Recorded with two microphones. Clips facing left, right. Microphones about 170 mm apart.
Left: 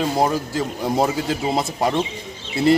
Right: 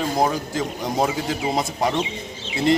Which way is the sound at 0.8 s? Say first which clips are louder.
Left 3 dB; 5° left (ahead or behind).